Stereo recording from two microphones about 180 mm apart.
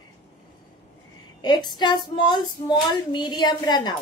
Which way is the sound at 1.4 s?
25° left (ahead or behind).